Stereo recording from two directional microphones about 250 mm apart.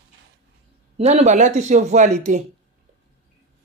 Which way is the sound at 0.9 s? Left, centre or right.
Right.